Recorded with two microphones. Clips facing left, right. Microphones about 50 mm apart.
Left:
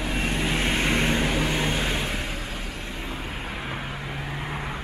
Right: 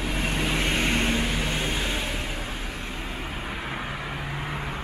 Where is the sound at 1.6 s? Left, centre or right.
Left.